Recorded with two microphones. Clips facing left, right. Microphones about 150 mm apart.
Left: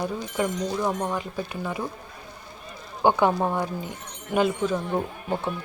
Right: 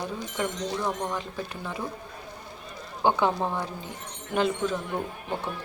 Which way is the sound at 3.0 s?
15° left (ahead or behind).